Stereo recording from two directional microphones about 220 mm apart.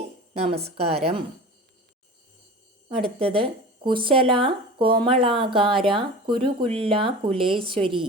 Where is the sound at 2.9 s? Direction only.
25° right (ahead or behind).